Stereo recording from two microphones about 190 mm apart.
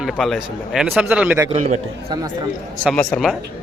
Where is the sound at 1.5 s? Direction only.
40° right (ahead or behind).